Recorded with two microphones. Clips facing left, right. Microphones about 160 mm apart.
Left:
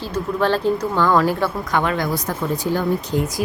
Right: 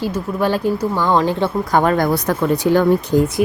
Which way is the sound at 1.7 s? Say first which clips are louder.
Right 7 dB; 40° right (ahead or behind).